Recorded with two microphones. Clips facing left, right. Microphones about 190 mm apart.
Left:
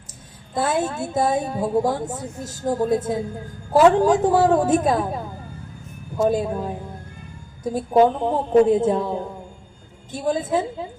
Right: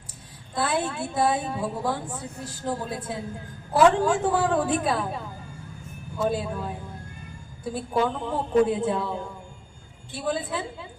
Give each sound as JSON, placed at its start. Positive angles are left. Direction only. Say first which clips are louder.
{"t": 0.5, "sound": "speech", "louder": "left 4 dB", "side_deg": 45}